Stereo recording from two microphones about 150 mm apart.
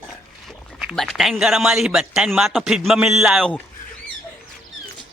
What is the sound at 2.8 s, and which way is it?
Speech, 5° right (ahead or behind).